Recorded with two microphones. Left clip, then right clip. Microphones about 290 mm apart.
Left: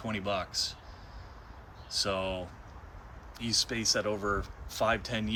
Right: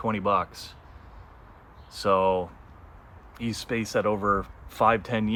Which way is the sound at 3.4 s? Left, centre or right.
Centre.